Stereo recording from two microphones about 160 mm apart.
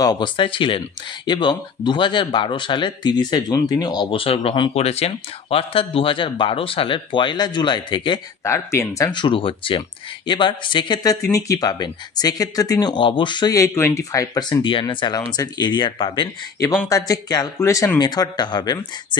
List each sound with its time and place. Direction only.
0.0 s speech: 25° left (ahead or behind)
8.5 s speech: 15° left (ahead or behind)